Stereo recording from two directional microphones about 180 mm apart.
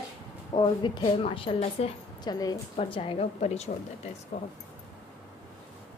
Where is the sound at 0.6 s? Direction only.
25° left (ahead or behind).